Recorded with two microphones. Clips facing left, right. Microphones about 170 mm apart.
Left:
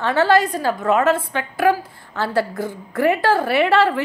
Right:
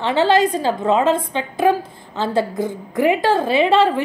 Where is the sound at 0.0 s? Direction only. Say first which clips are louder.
Right 1 dB; 20° right (ahead or behind).